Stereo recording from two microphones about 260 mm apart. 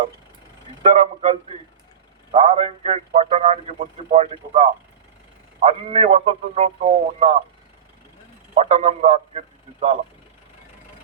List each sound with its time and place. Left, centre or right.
0.8 s a man's voice: right
8.5 s a man's voice: right